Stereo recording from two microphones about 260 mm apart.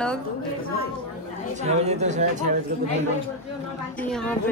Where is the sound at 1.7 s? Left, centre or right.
Right.